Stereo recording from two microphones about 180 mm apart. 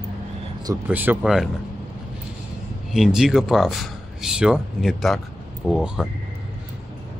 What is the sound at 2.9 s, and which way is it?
Speech, 5° right (ahead or behind).